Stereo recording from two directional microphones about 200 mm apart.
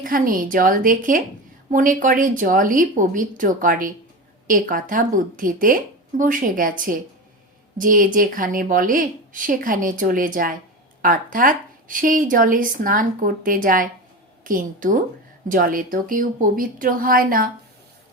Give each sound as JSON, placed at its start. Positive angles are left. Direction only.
{"t": 0.0, "sound": "speech", "side_deg": -45}